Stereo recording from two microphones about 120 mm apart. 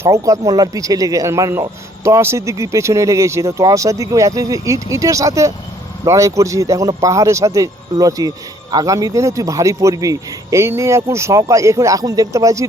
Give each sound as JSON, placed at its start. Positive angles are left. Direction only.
{"t": 0.0, "sound": "speech", "side_deg": -25}